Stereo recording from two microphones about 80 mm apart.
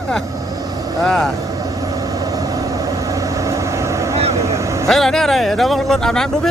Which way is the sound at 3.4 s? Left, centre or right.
Right.